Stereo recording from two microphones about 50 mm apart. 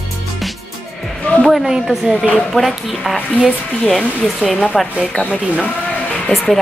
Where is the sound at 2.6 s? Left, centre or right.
Centre.